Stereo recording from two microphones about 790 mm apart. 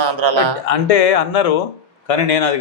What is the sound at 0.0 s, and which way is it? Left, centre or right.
Speech, right.